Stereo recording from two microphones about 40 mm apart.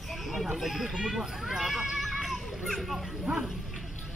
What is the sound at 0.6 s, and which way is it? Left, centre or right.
Speech, centre.